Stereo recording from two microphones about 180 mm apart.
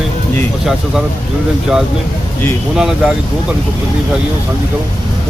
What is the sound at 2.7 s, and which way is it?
Speech, 5° right (ahead or behind).